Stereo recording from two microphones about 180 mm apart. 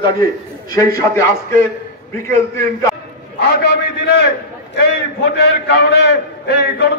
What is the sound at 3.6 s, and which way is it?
Speech, 70° left (ahead or behind).